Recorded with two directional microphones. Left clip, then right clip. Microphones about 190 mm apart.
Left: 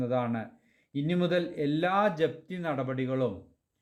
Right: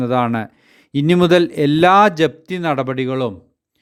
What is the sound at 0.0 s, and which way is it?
A man's voice, 40° right (ahead or behind).